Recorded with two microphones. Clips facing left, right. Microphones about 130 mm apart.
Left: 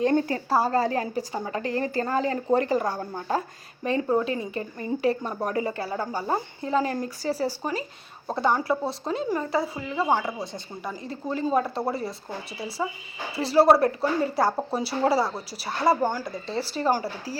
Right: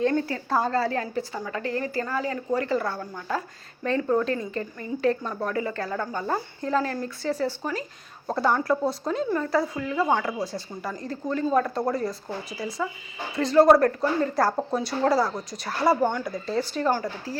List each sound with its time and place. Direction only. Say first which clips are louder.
0.0 s speech: left 2 dB; 20° left (ahead or behind)
3.8 s speech: even; 15° left (ahead or behind)
12.5 s speech: even; 30° left (ahead or behind)
13.3 s speech: right 2 dB; 5° left (ahead or behind)